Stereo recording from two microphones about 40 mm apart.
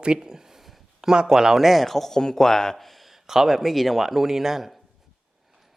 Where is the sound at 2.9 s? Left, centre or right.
Centre.